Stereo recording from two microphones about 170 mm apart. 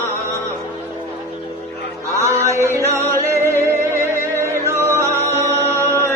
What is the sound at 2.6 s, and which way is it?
Music, 15° right (ahead or behind).